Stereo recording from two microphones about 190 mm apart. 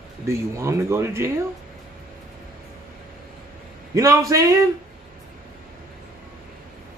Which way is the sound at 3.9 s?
15° right (ahead or behind).